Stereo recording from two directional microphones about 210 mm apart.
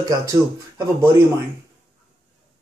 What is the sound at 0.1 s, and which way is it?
Speech, 15° right (ahead or behind).